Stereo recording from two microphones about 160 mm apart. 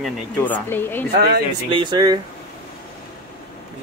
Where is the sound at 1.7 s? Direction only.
30° right (ahead or behind).